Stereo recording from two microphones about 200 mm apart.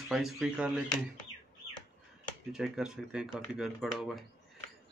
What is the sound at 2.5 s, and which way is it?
Speech, 5° right (ahead or behind).